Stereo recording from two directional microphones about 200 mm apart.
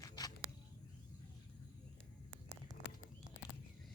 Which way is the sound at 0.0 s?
20° left (ahead or behind).